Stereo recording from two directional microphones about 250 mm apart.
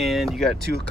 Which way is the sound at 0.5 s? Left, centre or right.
Right.